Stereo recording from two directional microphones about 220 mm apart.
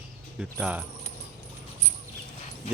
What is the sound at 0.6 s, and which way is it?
Speech, 5° right (ahead or behind).